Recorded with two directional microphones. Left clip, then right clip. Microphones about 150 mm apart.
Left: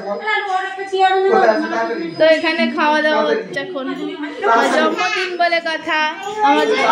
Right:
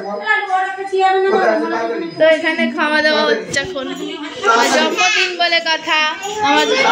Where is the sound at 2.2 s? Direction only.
15° left (ahead or behind).